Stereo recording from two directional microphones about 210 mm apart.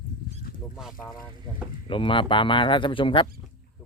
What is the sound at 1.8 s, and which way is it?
Speech, 25° left (ahead or behind).